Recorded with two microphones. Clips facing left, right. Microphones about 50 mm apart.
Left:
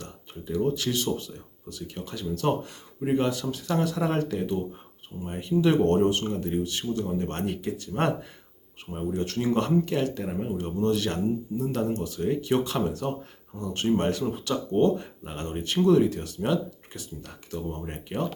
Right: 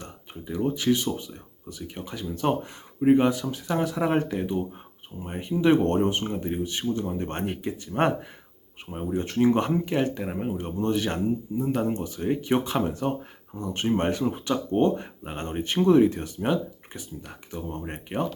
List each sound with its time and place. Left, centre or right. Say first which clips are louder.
0.0 s speech: even; centre